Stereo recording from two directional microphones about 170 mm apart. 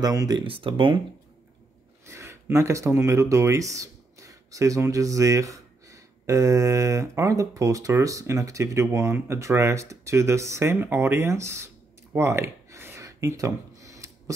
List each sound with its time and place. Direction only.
0.0 s speech: 20° right (ahead or behind)
2.0 s speech: 15° right (ahead or behind)